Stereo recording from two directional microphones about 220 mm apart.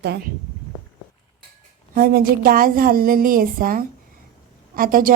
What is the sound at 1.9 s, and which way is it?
A woman's voice, 45° right (ahead or behind).